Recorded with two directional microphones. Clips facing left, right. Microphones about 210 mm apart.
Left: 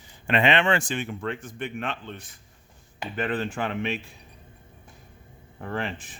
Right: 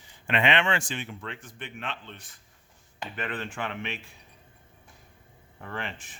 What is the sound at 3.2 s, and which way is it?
Speech, 35° left (ahead or behind).